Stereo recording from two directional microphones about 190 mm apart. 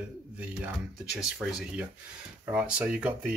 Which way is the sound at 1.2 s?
5° right (ahead or behind).